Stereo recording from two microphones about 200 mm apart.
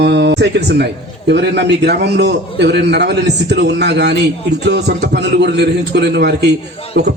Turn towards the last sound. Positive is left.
turn(degrees=-60)  # may be behind; listen again after turning